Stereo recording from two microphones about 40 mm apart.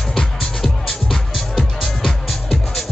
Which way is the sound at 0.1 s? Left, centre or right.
Centre.